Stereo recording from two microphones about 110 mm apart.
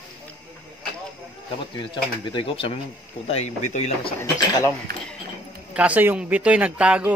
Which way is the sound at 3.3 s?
90° left.